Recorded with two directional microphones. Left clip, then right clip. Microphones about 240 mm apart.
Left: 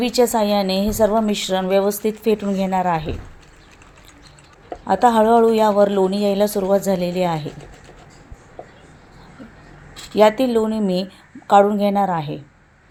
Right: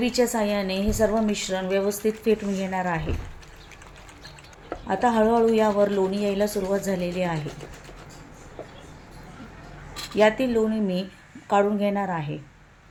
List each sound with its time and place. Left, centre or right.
0.0 s a woman's voice: left
4.9 s a woman's voice: left
10.2 s a woman's voice: left